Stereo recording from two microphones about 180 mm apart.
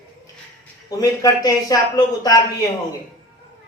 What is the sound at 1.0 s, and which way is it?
Speech, 20° left (ahead or behind).